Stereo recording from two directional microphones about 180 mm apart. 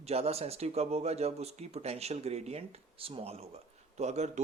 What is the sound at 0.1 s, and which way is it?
Speech, 35° right (ahead or behind).